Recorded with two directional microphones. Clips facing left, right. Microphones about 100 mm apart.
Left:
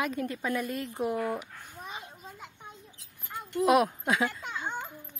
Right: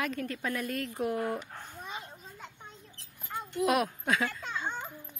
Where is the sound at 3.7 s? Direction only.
15° left (ahead or behind).